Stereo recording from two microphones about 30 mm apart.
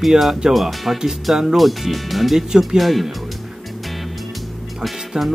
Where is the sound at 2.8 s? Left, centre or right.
Centre.